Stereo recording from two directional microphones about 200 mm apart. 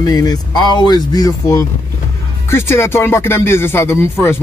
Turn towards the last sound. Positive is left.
turn(degrees=15)  # may be behind; listen again after turning